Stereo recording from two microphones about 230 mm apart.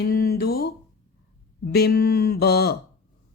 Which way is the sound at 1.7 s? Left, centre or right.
Left.